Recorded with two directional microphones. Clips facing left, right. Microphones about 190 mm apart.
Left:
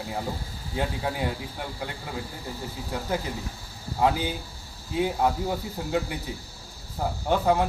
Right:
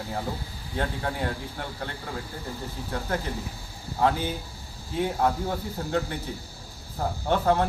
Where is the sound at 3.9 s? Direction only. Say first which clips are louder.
Even; 10° left (ahead or behind).